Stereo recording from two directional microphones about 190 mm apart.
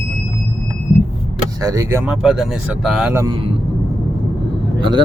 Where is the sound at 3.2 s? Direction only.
25° right (ahead or behind).